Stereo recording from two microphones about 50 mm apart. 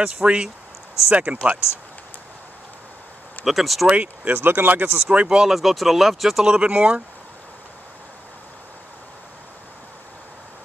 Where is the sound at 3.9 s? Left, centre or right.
Right.